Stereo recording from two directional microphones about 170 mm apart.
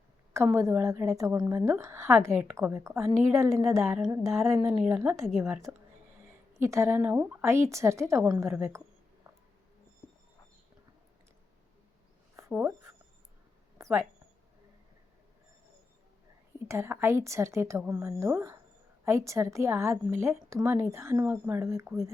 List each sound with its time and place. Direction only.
0.3 s a woman's voice: 15° right (ahead or behind)
12.4 s a sound: 10° right (ahead or behind)
16.6 s a woman's voice: 15° right (ahead or behind)